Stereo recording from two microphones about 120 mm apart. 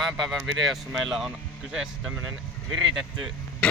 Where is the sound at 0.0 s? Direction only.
Centre (ahead or behind).